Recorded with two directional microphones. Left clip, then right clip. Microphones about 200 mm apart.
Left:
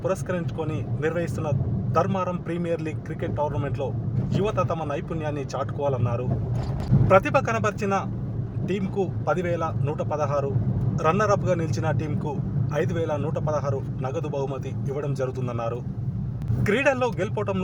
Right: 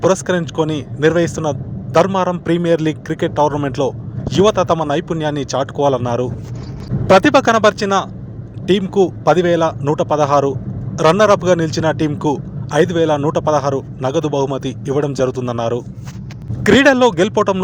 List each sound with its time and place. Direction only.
0.0 s speech: 35° right (ahead or behind)